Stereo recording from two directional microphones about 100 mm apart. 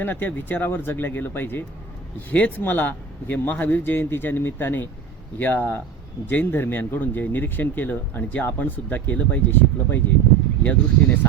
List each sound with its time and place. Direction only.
0.0 s speech: 20° left (ahead or behind)